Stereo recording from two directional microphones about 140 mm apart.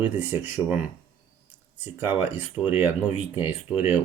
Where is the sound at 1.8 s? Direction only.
15° right (ahead or behind).